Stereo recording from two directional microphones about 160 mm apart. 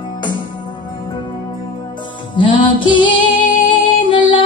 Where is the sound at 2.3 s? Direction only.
30° left (ahead or behind).